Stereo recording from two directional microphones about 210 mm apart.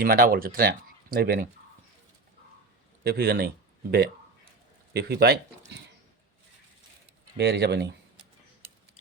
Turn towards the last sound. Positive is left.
turn(degrees=-55)  # may be behind; listen again after turning